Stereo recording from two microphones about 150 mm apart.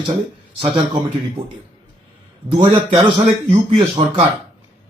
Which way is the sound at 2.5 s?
35° right (ahead or behind).